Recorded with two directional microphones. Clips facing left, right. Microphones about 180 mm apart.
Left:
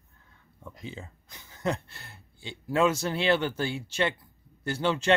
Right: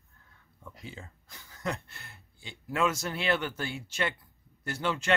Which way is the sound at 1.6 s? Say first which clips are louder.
Left 5 dB; 35° left (ahead or behind).